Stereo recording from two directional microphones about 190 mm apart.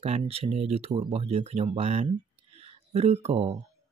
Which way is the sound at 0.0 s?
35° right (ahead or behind).